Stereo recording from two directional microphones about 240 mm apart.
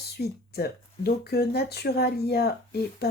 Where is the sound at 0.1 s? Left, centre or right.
Left.